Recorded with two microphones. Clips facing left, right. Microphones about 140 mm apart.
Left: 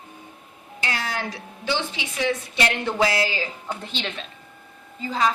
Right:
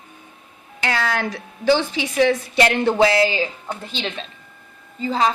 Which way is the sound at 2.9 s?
30° right (ahead or behind).